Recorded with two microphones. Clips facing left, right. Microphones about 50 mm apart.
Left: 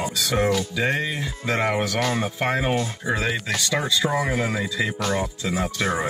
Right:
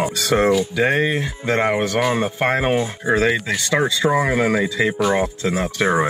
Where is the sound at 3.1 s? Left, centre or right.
Right.